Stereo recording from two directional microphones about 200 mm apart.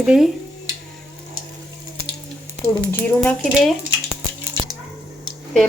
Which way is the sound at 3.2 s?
Centre (ahead or behind).